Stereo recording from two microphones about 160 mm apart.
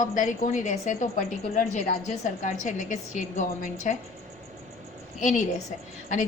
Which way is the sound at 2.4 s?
50° left (ahead or behind).